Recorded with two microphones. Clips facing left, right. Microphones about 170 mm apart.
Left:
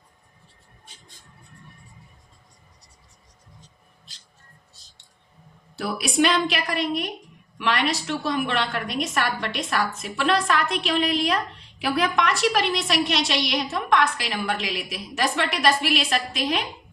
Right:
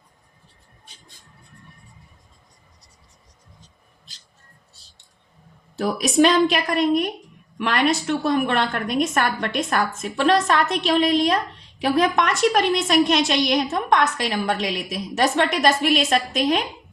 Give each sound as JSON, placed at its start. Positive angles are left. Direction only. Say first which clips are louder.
{"t": 5.7, "sound": "a woman's voice", "louder": "right 5 dB", "side_deg": -40}